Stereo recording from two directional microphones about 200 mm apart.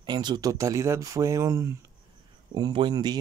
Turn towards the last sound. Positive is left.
turn(degrees=-20)  # may be behind; listen again after turning